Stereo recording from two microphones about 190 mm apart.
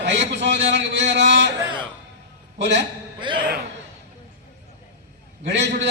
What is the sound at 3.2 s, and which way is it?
Speech, 25° right (ahead or behind).